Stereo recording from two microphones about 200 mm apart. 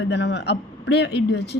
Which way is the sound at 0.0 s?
60° left (ahead or behind).